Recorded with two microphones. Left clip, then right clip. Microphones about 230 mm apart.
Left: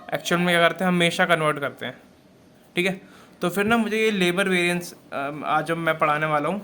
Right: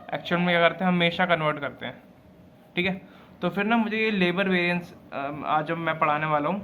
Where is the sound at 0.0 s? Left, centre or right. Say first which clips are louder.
Left 3 dB; left.